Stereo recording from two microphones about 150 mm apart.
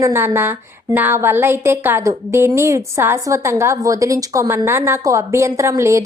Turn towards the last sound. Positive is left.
turn(degrees=-20)  # may be behind; listen again after turning